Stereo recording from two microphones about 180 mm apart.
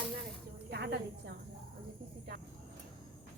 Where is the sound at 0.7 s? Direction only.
65° right (ahead or behind).